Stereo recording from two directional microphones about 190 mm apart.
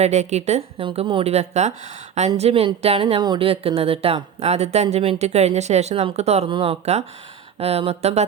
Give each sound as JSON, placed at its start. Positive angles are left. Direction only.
{"t": 0.0, "sound": "speech", "side_deg": -35}